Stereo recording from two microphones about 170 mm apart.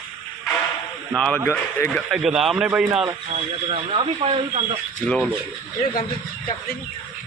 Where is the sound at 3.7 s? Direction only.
35° right (ahead or behind).